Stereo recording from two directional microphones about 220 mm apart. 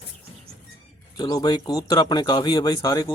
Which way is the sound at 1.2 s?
15° left (ahead or behind).